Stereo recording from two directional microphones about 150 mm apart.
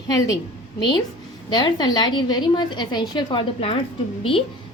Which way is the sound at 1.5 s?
30° left (ahead or behind).